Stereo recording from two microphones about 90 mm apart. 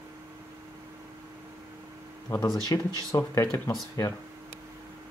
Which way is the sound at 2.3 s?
30° left (ahead or behind).